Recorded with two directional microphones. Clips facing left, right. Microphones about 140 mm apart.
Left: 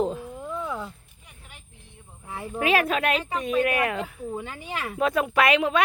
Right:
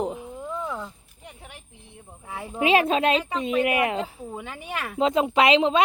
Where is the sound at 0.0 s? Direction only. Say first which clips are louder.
Left 2 dB; 15° right (ahead or behind).